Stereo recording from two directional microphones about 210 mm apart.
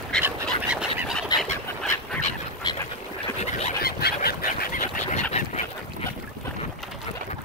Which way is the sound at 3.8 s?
45° left (ahead or behind).